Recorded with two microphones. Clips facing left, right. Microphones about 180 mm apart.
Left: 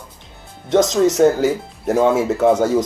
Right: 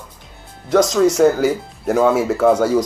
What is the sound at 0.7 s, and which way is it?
Speech, 20° left (ahead or behind).